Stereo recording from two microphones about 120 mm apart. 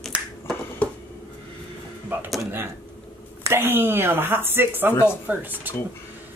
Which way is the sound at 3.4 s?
20° right (ahead or behind).